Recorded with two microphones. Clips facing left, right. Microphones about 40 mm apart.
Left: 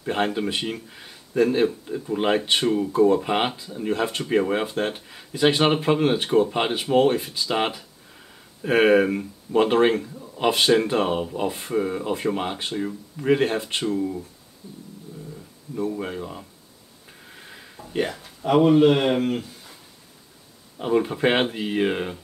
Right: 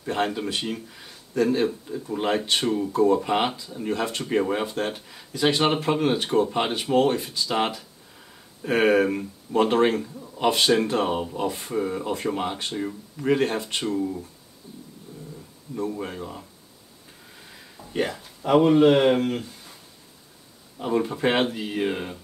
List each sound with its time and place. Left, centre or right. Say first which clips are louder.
0.0 s speech: left 2 dB; left
2.6 s speech: left 2 dB; centre
12.7 s speech: left 2 dB; centre
13.4 s speech: left 2 dB; left
16.0 s speech: left 2 dB; centre
17.4 s a sound: left 3 dB; left
17.9 s speech: left 1 dB; centre
20.7 s speech: left 3 dB; centre